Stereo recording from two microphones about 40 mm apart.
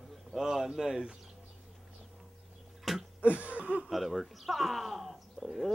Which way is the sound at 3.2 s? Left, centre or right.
Right.